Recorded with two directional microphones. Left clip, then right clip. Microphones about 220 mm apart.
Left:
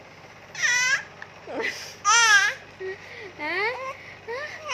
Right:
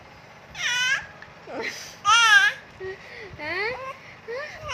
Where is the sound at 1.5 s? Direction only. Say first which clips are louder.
Left 2 dB; 15° left (ahead or behind).